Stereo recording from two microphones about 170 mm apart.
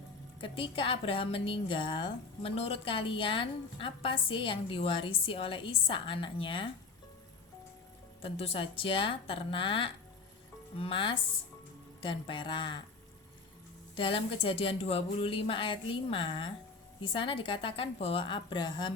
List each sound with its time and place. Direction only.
0.4 s a woman's voice: 30° left (ahead or behind)
8.2 s a woman's voice: 35° left (ahead or behind)
13.9 s a woman's voice: 30° left (ahead or behind)